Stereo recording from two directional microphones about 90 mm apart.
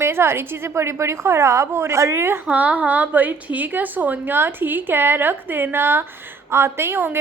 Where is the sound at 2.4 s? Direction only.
15° right (ahead or behind).